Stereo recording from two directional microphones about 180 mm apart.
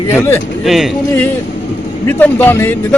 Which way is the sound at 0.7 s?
Centre (ahead or behind).